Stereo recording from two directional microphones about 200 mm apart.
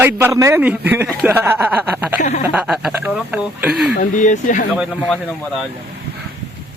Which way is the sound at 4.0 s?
40° left (ahead or behind).